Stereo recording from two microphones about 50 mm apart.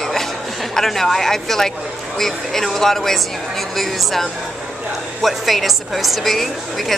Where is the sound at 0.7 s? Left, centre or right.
Centre.